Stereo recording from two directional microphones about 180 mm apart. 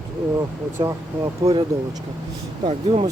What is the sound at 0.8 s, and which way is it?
Speech, 20° right (ahead or behind).